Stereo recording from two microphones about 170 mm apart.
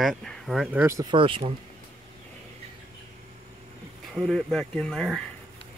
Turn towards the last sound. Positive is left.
turn(degrees=5)  # may be behind; listen again after turning